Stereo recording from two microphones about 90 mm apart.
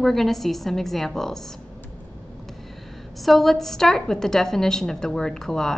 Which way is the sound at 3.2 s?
Centre (ahead or behind).